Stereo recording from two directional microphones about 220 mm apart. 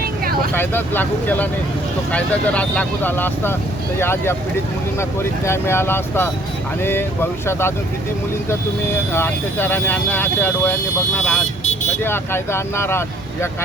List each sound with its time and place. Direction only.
0.5 s speech: 10° left (ahead or behind)
5.5 s speech: 10° left (ahead or behind)
9.1 s speech: 10° left (ahead or behind)